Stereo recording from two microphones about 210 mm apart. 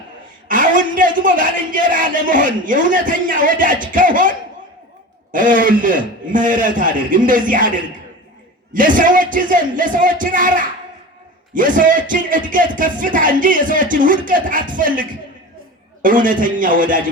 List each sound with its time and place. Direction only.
0.4 s a man's voice: 40° right (ahead or behind)
5.3 s a man's voice: 40° right (ahead or behind)